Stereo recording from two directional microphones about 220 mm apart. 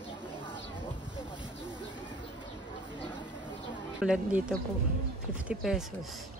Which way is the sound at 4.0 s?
5° right (ahead or behind).